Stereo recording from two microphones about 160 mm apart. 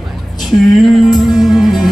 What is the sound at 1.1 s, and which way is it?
Music, centre (ahead or behind).